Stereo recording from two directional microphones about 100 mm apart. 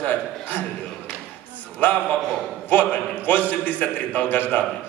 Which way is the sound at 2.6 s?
15° left (ahead or behind).